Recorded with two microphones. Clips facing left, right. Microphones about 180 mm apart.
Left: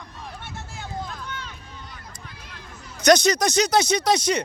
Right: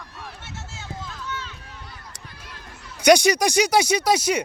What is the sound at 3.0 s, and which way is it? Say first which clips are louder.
Speech: right 1 dB; 10° right (ahead or behind).